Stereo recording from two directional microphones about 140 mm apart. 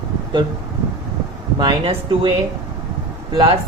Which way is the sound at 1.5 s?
35° right (ahead or behind).